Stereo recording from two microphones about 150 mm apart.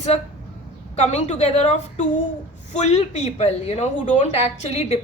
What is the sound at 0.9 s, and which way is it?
A woman's voice, 50° left (ahead or behind).